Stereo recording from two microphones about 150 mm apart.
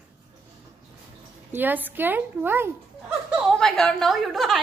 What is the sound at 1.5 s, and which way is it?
Speech, 15° right (ahead or behind).